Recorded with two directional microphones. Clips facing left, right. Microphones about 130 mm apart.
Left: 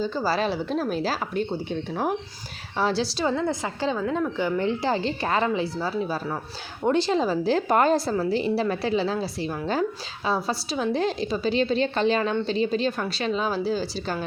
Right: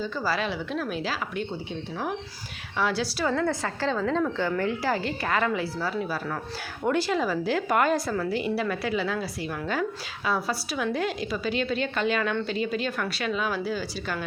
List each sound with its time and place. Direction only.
0.0 s a woman's voice: 30° left (ahead or behind)
2.7 s a woman's voice: 30° left (ahead or behind)